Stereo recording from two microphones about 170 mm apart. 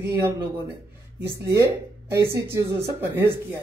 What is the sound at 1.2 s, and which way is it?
Speech, 15° right (ahead or behind).